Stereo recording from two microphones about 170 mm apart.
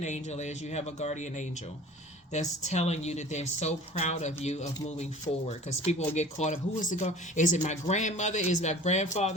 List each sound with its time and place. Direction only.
0.0 s speech: 45° left (ahead or behind)